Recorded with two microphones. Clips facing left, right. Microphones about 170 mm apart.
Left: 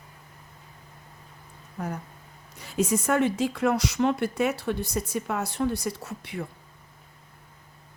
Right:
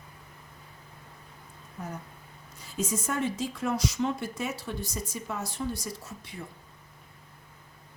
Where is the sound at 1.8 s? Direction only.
70° left (ahead or behind).